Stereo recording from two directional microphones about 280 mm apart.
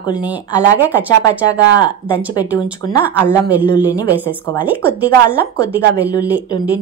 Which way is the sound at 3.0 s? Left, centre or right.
Centre.